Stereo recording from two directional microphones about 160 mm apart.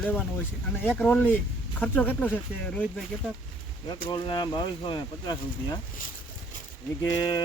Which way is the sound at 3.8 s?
30° left (ahead or behind).